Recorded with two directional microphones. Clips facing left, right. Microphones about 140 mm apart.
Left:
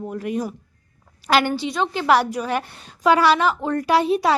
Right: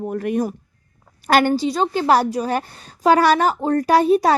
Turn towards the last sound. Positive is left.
turn(degrees=-45)  # may be behind; listen again after turning